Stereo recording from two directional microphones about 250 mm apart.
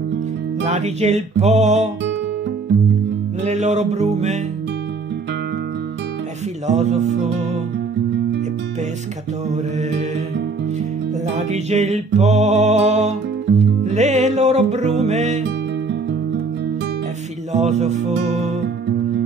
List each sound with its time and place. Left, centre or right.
0.7 s music: right
3.4 s music: right
6.7 s music: right
9.5 s music: right
11.3 s music: right
17.5 s music: right